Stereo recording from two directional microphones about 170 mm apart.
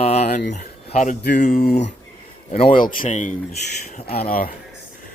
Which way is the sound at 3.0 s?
50° left (ahead or behind).